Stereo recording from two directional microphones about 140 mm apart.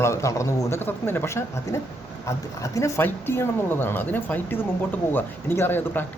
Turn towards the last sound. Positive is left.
turn(degrees=15)  # may be behind; listen again after turning